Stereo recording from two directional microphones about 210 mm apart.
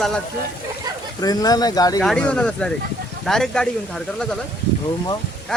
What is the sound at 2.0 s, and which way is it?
Speech, 5° left (ahead or behind).